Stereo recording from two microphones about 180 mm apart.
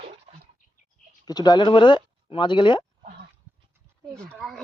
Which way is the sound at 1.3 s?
20° left (ahead or behind).